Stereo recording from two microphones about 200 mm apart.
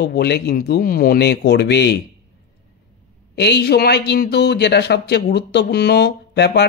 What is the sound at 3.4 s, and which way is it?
Speech, 55° left (ahead or behind).